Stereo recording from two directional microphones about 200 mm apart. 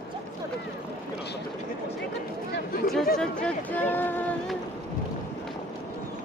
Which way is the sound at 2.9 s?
5° left (ahead or behind).